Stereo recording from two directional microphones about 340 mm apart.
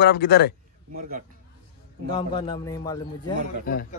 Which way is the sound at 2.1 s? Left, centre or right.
Centre.